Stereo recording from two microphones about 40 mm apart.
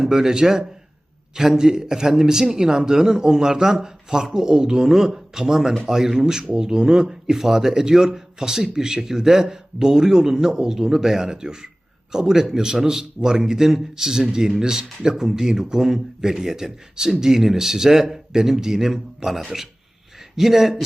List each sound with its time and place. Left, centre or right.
0.0 s a man's voice: centre